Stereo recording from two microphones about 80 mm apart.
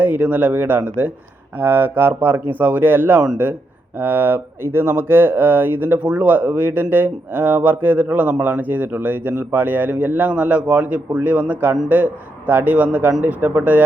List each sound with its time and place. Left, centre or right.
0.0 s speech: right